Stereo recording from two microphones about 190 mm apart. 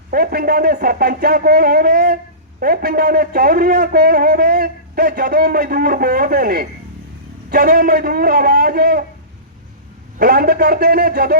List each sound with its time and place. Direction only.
0.1 s a man's voice: 50° right (ahead or behind)
10.2 s a man's voice: 50° right (ahead or behind)